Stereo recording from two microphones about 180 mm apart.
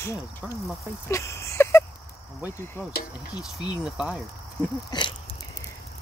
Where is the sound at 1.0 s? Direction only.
15° left (ahead or behind).